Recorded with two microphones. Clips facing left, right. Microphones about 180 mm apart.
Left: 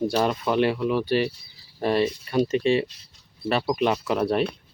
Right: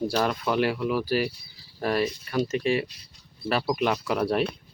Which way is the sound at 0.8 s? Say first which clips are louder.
Left 2 dB; 5° right (ahead or behind).